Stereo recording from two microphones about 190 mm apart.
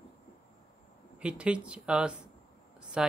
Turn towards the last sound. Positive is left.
turn(degrees=-5)  # may be behind; listen again after turning